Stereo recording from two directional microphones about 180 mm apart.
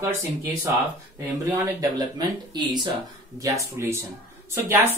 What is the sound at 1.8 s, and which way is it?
Speech, 20° right (ahead or behind).